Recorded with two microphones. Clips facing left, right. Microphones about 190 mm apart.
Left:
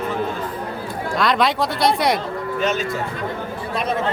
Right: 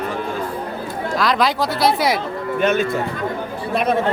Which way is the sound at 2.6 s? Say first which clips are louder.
Right 5 dB; 55° right (ahead or behind).